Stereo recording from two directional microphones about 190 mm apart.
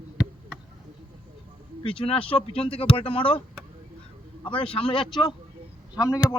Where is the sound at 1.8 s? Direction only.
30° left (ahead or behind).